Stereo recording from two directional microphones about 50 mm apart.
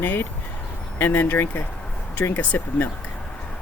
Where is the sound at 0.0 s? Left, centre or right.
Left.